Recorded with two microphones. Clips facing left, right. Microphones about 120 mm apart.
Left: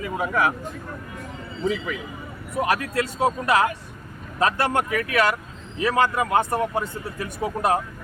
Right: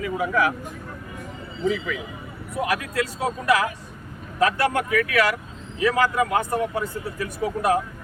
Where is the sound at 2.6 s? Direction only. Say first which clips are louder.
Left 2 dB; 35° left (ahead or behind).